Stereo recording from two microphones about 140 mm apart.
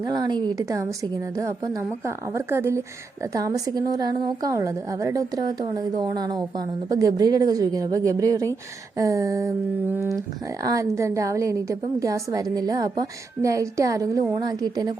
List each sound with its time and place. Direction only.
0.0 s a woman's voice: 30° right (ahead or behind)